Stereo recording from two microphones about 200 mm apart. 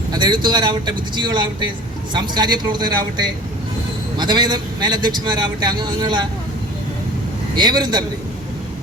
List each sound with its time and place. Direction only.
0.1 s a man's voice: 20° right (ahead or behind)
7.5 s a man's voice: 20° right (ahead or behind)